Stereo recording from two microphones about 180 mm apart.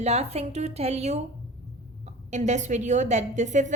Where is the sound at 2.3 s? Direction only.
40° right (ahead or behind).